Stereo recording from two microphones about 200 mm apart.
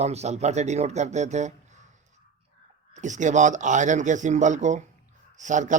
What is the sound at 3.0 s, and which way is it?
A man's voice, 35° right (ahead or behind).